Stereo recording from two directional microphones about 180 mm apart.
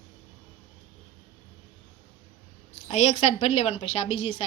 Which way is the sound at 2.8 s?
40° left (ahead or behind).